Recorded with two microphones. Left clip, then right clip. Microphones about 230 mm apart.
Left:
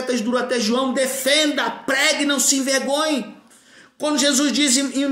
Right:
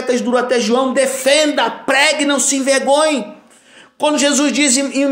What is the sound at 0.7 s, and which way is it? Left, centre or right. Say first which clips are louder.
Speech: right 6 dB; centre.